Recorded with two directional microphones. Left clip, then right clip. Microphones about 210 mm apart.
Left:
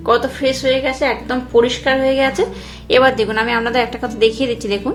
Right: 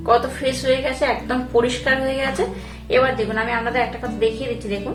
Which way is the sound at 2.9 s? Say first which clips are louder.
Left 5 dB; 45° left (ahead or behind).